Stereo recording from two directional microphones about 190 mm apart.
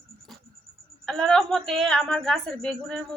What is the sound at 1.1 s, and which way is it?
A woman's voice, 5° left (ahead or behind).